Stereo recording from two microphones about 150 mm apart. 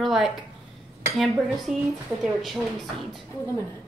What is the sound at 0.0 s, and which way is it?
A woman's voice, centre (ahead or behind).